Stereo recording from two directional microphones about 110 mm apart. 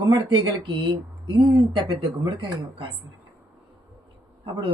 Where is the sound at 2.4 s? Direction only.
45° right (ahead or behind).